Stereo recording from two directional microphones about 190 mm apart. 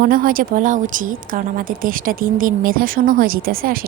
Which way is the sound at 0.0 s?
50° right (ahead or behind).